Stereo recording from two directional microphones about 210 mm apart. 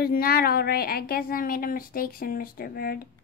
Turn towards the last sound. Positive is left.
turn(degrees=45)  # may be behind; listen again after turning